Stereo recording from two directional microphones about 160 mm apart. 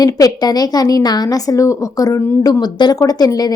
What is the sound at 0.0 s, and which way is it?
A woman's voice, 25° left (ahead or behind).